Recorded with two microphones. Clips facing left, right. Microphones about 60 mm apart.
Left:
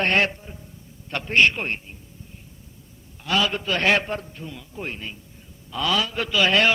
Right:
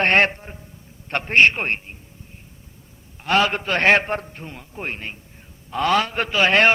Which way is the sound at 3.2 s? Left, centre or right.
Right.